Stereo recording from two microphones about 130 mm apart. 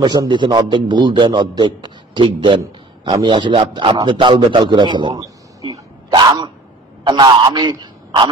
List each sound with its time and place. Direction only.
0.0 s a man's voice: 35° right (ahead or behind)